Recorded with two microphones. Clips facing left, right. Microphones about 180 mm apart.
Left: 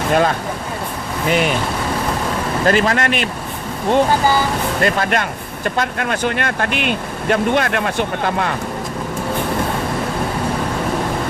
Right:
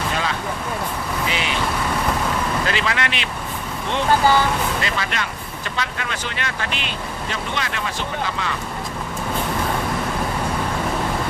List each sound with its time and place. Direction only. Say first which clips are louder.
0.1 s speech: left 8 dB; 50° left (ahead or behind)
2.6 s speech: left 8 dB; 45° left (ahead or behind)
4.8 s speech: left 8 dB; 50° left (ahead or behind)